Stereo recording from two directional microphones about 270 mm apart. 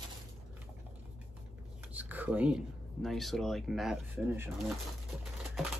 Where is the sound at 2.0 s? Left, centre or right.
Centre.